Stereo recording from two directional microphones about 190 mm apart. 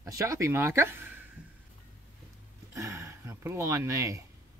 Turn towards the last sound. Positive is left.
turn(degrees=-15)  # may be behind; listen again after turning